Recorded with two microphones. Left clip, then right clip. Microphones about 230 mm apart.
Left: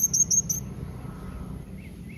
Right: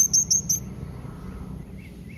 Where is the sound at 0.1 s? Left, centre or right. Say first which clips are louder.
Right 2 dB; centre.